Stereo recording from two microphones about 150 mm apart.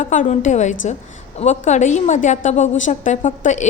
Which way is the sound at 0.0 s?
55° left (ahead or behind).